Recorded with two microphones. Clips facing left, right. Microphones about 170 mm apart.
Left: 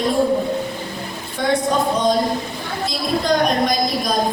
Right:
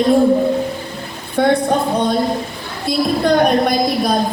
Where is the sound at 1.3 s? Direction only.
60° right (ahead or behind).